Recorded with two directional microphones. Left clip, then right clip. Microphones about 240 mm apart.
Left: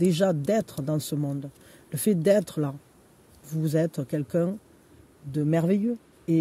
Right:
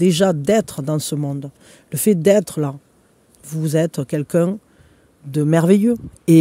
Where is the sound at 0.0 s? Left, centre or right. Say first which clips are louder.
Right 8 dB; right.